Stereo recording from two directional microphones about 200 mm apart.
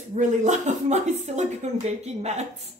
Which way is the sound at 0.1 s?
35° right (ahead or behind).